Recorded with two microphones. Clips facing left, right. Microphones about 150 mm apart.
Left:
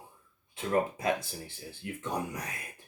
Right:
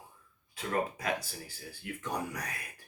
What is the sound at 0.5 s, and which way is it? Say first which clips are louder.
Speech: left 4 dB; 25° left (ahead or behind).